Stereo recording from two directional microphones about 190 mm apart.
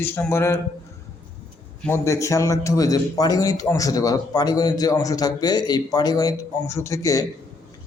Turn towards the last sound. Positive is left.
turn(degrees=15)  # may be behind; listen again after turning